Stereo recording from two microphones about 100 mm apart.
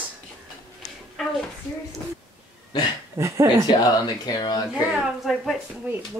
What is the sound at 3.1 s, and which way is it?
Speech, 30° right (ahead or behind).